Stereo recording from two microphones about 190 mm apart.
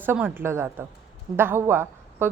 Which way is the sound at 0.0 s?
10° right (ahead or behind).